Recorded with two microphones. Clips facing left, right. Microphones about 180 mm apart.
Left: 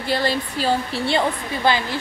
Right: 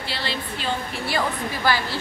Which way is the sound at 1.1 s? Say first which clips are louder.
Left 3 dB; 25° left (ahead or behind).